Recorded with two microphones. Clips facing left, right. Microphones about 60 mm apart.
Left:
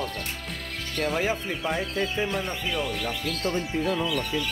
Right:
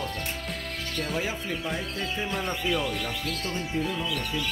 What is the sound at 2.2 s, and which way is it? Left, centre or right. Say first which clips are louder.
Speech: right 1 dB; centre.